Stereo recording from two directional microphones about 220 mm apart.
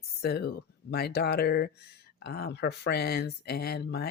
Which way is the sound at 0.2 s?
45° left (ahead or behind).